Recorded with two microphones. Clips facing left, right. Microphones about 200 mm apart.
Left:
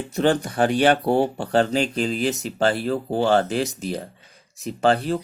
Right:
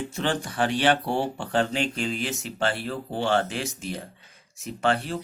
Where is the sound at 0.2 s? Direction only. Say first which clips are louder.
Left 7 dB; 40° left (ahead or behind).